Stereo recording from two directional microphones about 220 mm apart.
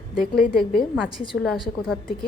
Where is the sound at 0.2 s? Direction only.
40° left (ahead or behind).